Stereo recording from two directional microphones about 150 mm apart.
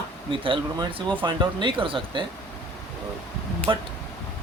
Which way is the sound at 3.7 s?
30° right (ahead or behind).